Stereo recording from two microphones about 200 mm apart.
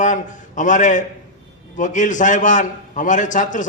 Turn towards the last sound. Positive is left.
turn(degrees=40)  # may be behind; listen again after turning